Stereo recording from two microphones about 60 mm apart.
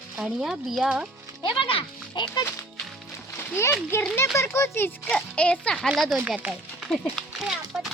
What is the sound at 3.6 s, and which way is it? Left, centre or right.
Speech, left.